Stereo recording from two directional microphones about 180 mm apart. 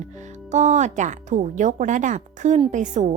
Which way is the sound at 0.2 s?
40° right (ahead or behind).